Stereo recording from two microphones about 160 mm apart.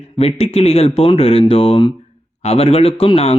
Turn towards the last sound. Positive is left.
turn(degrees=40)  # may be behind; listen again after turning